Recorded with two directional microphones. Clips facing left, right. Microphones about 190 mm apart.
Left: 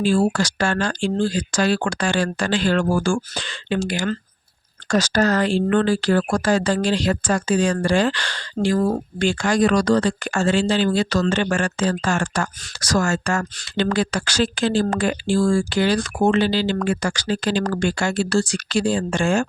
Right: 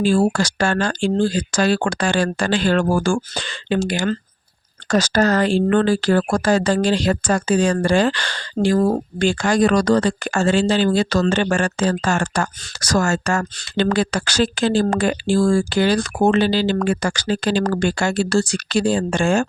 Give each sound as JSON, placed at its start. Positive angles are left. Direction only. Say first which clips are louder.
{"t": 0.0, "sound": "speech", "louder": "right 2 dB", "side_deg": -40}